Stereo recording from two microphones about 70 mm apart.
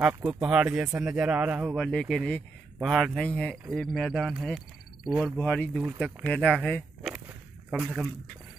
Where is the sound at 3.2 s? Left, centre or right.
Centre.